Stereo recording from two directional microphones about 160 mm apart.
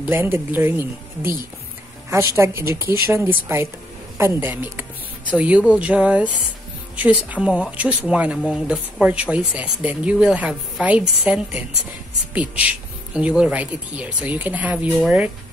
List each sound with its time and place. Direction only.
0.0 s a woman's voice: 15° right (ahead or behind)